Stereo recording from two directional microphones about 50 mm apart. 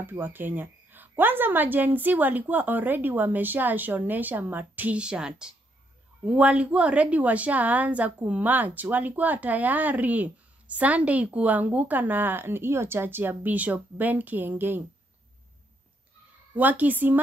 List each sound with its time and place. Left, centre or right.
0.0 s a woman's voice: right
4.9 s speech: centre
6.2 s a woman's voice: right
16.5 s a woman's voice: right